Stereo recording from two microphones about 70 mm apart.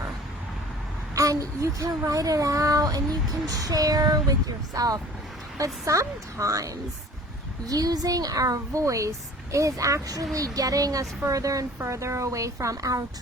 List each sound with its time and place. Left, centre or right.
1.1 s speech: right
2.0 s child singing: right
5.5 s speech: right
7.7 s child singing: right
11.8 s speech: right